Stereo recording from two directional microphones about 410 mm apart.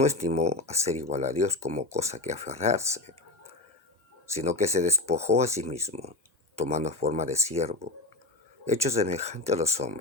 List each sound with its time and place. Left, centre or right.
0.0 s speech: centre
4.4 s speech: centre